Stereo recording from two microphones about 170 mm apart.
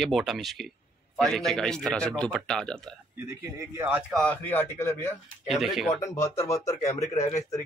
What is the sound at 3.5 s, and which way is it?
Speech, 10° right (ahead or behind).